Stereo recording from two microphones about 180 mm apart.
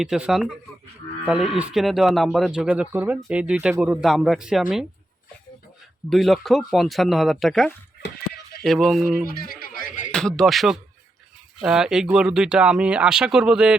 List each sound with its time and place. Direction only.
0.0 s speech: centre (ahead or behind)
6.1 s speech: centre (ahead or behind)
9.4 s a sound: 55° left (ahead or behind)
10.1 s speech: 5° left (ahead or behind)